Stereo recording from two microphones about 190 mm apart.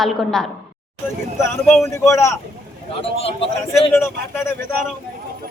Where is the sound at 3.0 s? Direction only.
30° left (ahead or behind).